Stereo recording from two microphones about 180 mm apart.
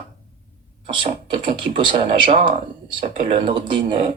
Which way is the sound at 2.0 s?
40° right (ahead or behind).